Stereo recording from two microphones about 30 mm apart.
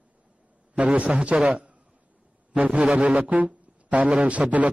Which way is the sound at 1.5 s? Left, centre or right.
Right.